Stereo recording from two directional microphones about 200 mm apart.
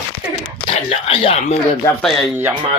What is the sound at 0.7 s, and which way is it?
Speech, 30° left (ahead or behind).